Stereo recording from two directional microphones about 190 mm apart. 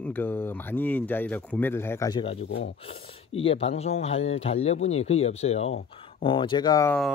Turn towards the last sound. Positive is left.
turn(degrees=20)  # may be behind; listen again after turning